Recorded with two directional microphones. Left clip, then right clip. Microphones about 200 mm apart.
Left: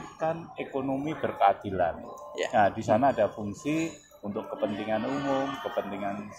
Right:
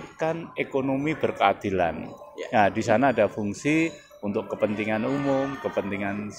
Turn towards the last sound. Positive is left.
turn(degrees=-40)  # may be behind; listen again after turning